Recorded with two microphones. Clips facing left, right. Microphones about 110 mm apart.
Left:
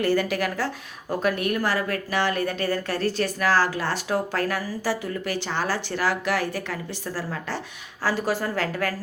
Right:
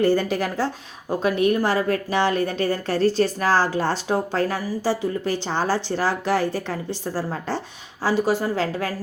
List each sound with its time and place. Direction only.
0.0 s a woman's voice: 30° right (ahead or behind)
8.0 s a woman's voice: 20° right (ahead or behind)